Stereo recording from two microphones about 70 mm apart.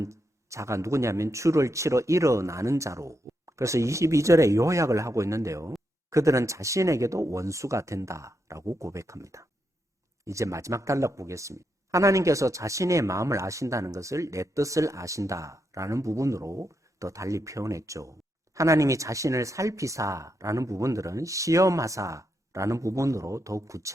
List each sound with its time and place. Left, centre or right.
0.0 s speech: right